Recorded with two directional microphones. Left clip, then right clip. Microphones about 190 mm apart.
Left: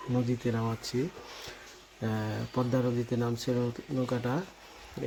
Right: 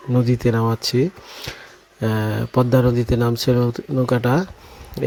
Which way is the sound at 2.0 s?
45° right (ahead or behind).